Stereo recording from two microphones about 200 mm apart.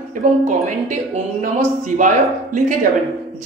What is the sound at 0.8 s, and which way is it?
Speech, 35° right (ahead or behind).